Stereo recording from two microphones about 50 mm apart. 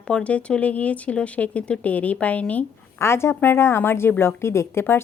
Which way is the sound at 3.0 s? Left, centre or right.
Left.